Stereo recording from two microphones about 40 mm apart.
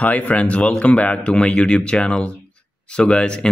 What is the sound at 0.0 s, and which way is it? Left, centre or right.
Speech, left.